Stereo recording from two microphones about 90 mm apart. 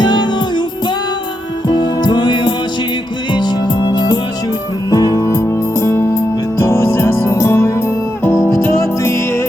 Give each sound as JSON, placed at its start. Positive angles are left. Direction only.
{"t": 0.0, "sound": "music", "side_deg": 55}
{"t": 1.6, "sound": "music", "side_deg": 55}
{"t": 5.2, "sound": "music", "side_deg": 30}